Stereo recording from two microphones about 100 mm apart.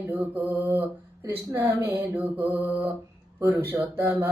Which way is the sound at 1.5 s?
25° right (ahead or behind).